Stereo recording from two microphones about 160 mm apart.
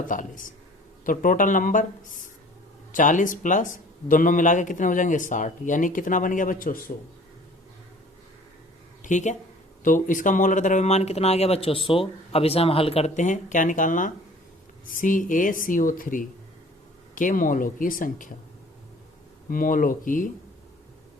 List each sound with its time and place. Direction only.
0.1 s speech: 55° left (ahead or behind)
9.0 s a sound: 50° left (ahead or behind)
9.8 s speech: 55° left (ahead or behind)
19.5 s speech: 60° left (ahead or behind)